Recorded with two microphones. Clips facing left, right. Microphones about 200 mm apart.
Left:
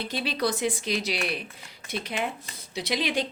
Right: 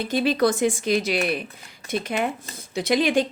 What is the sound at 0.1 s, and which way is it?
Speech, 50° right (ahead or behind).